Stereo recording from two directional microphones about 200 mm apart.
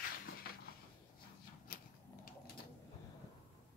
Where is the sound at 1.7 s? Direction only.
45° left (ahead or behind).